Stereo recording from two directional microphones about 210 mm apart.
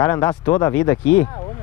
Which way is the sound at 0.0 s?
15° left (ahead or behind).